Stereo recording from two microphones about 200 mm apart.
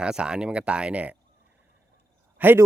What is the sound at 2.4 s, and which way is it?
Speech, 10° right (ahead or behind).